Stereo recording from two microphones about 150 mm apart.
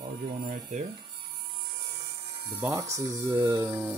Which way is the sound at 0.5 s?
55° right (ahead or behind).